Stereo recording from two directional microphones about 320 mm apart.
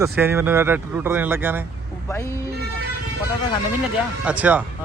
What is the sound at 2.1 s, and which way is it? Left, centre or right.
Speech, centre.